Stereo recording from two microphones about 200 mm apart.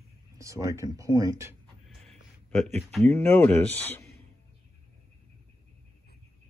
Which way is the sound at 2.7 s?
5° left (ahead or behind).